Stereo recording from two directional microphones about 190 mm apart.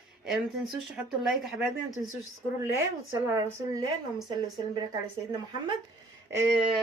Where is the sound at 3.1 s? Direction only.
15° right (ahead or behind).